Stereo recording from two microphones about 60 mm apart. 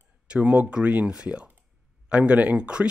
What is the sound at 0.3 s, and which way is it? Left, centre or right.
Speech, right.